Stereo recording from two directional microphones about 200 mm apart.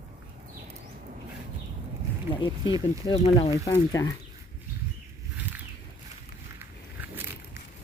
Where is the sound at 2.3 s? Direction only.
25° left (ahead or behind).